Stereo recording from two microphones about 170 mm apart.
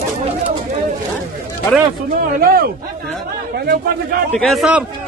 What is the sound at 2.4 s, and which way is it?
Speech, 65° right (ahead or behind).